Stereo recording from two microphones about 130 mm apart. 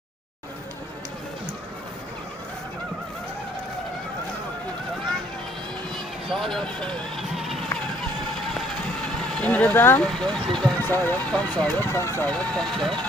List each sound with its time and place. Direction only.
6.2 s run: centre (ahead or behind)
9.3 s speech: 10° left (ahead or behind)
10.1 s speech: 5° left (ahead or behind)
10.8 s speech: 15° left (ahead or behind)
12.3 s speech: 5° left (ahead or behind)